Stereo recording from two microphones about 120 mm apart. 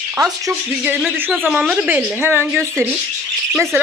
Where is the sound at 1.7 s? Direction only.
15° right (ahead or behind).